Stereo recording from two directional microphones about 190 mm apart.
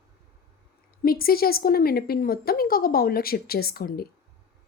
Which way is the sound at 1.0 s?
50° left (ahead or behind).